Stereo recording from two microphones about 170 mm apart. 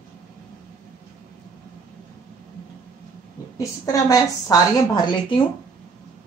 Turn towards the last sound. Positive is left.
turn(degrees=30)  # may be behind; listen again after turning